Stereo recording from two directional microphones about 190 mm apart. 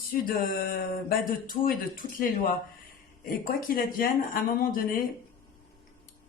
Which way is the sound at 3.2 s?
50° left (ahead or behind).